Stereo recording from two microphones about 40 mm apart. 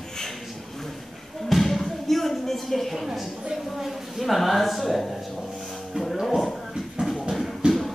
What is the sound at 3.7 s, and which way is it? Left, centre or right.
A woman's voice, centre.